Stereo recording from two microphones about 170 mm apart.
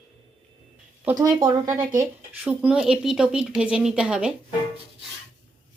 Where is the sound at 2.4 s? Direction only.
5° right (ahead or behind).